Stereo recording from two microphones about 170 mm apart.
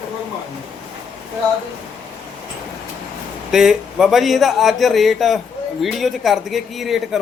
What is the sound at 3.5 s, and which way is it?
Speech, centre (ahead or behind).